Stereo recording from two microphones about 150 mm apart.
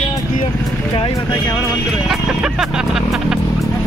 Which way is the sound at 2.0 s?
Centre (ahead or behind).